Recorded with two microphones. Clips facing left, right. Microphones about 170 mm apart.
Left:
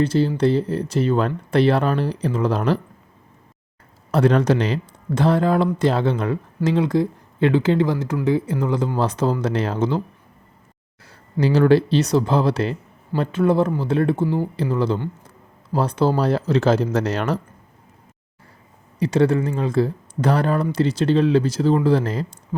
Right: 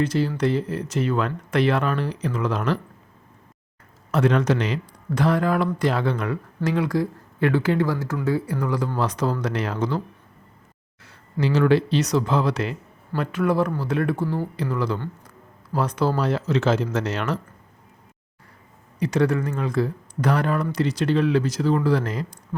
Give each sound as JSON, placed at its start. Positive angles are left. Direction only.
{"t": 0.0, "sound": "speech", "side_deg": 30}
{"t": 4.1, "sound": "speech", "side_deg": 35}
{"t": 11.0, "sound": "speech", "side_deg": 35}
{"t": 18.9, "sound": "speech", "side_deg": 30}